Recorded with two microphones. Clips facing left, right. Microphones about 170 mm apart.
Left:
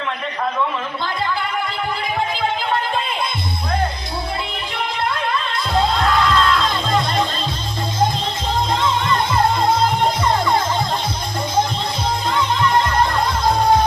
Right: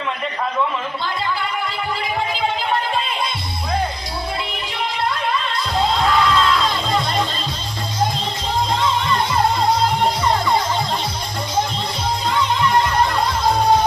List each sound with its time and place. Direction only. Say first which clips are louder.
6.0 s music: even; 5° right (ahead or behind)